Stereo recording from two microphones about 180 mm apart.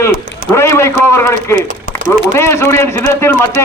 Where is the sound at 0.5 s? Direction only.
15° left (ahead or behind).